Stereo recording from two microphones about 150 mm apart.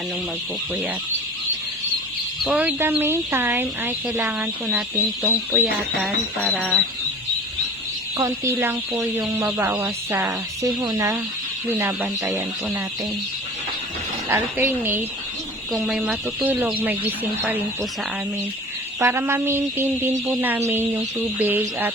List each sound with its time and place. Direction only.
2.4 s speech: 10° right (ahead or behind)
6.0 s music: centre (ahead or behind)
8.2 s speech: 20° right (ahead or behind)
10.6 s speech: 25° right (ahead or behind)
14.3 s speech: 15° right (ahead or behind)
15.7 s speech: 5° right (ahead or behind)
18.9 s speech: 15° right (ahead or behind)